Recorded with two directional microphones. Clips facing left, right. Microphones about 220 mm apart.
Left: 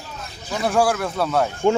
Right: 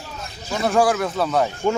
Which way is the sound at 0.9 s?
Centre (ahead or behind).